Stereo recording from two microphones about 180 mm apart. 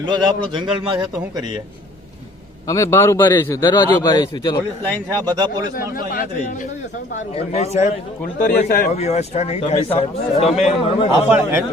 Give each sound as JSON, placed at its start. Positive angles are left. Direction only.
{"t": 0.0, "sound": "a man's voice", "side_deg": -25}
{"t": 2.6, "sound": "a man's voice", "side_deg": 15}
{"t": 5.3, "sound": "a man's voice", "side_deg": -25}
{"t": 5.9, "sound": "a man's voice", "side_deg": 55}
{"t": 7.3, "sound": "a man's voice", "side_deg": 35}
{"t": 9.0, "sound": "speech", "side_deg": 35}
{"t": 11.1, "sound": "speech", "side_deg": -15}